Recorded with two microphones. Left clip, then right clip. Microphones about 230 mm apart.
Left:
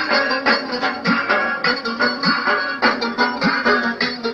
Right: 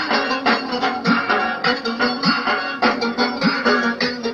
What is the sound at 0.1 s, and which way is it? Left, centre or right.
Music, right.